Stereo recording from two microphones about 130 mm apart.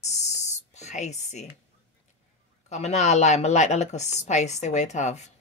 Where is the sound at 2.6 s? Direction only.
60° left (ahead or behind).